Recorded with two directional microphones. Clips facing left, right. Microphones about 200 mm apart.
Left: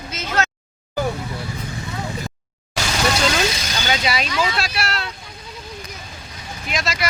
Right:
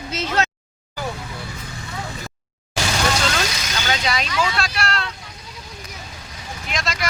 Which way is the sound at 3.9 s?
5° left (ahead or behind).